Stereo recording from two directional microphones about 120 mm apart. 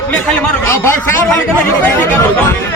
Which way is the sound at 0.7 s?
20° left (ahead or behind).